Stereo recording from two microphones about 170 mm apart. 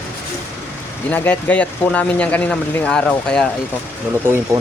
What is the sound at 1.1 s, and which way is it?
Speech, 10° left (ahead or behind).